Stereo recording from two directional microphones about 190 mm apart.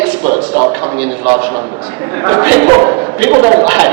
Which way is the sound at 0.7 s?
10° right (ahead or behind).